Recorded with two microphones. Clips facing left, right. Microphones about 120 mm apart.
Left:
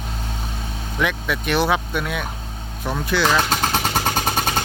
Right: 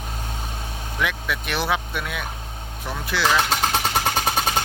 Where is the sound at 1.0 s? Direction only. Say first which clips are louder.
Left 4 dB; centre (ahead or behind).